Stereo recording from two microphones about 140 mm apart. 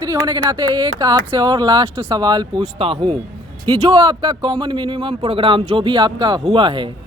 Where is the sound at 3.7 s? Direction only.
25° right (ahead or behind).